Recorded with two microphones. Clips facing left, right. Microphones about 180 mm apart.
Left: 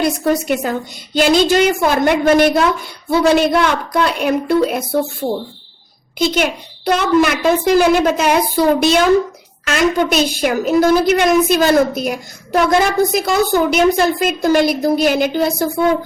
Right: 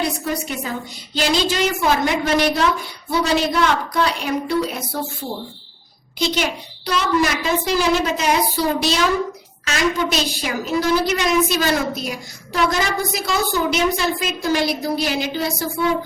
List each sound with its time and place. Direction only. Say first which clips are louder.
0.0 s a woman's voice: left 7 dB; 70° left (ahead or behind)
1.1 s a woman's voice: left 8 dB; 50° left (ahead or behind)